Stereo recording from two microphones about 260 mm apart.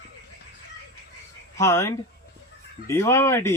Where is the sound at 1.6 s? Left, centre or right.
Centre.